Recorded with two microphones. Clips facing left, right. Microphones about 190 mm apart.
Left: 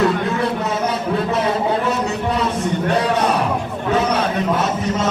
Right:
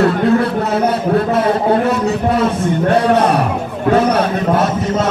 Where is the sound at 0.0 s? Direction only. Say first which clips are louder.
Right 5 dB; 55° right (ahead or behind).